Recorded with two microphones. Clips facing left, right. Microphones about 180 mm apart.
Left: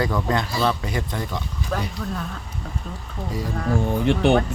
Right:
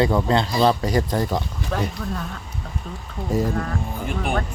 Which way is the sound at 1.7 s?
Centre (ahead or behind).